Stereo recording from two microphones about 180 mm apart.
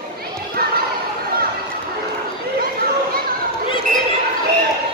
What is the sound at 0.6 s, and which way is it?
Chatter, 55° right (ahead or behind).